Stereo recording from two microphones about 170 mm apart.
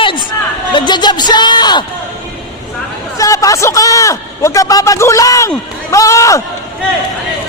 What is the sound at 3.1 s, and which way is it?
A man's voice, 20° left (ahead or behind).